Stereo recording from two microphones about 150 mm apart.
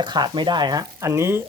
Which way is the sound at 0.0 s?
30° right (ahead or behind).